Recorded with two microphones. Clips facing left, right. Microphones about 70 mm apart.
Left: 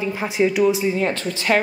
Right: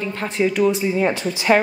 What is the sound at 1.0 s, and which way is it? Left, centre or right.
Speech, centre.